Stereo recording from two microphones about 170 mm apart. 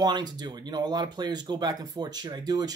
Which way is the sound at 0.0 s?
25° right (ahead or behind).